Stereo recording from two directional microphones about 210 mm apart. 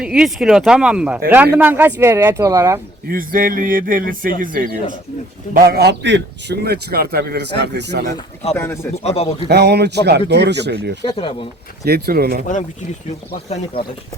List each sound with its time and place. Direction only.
0.0 s speech: 5° right (ahead or behind)
3.1 s a man's voice: 40° right (ahead or behind)
8.5 s speech: 10° left (ahead or behind)
9.0 s speech: 30° left (ahead or behind)
9.5 s a man's voice: 50° right (ahead or behind)
11.0 s speech: 25° left (ahead or behind)
11.9 s a man's voice: 50° right (ahead or behind)
13.1 s speech: 30° left (ahead or behind)